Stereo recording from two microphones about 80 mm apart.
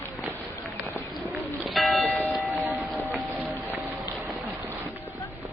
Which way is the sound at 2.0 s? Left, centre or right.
Centre.